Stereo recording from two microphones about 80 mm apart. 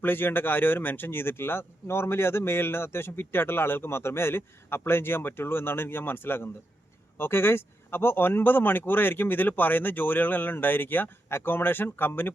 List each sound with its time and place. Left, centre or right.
0.0 s speech: left